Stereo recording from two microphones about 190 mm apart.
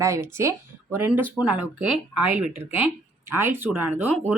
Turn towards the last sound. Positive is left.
turn(degrees=-10)  # may be behind; listen again after turning